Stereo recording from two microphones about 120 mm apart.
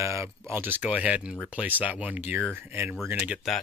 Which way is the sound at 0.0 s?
25° right (ahead or behind).